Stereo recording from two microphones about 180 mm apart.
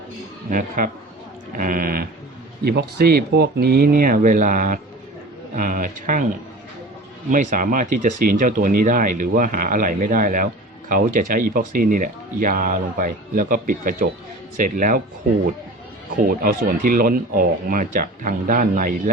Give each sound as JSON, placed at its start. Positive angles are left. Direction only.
{"t": 1.5, "sound": "speech", "side_deg": -50}
{"t": 7.3, "sound": "speech", "side_deg": -45}
{"t": 16.2, "sound": "speech", "side_deg": -50}